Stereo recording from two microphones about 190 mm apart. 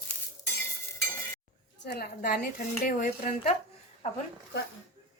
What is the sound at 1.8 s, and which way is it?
A woman's voice, 55° left (ahead or behind).